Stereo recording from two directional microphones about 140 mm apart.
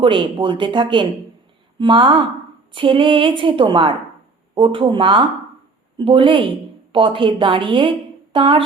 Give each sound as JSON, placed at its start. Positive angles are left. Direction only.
{"t": 0.0, "sound": "a woman's voice", "side_deg": -35}